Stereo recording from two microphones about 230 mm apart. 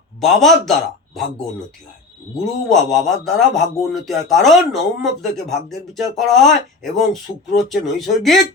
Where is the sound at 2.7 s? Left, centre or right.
Centre.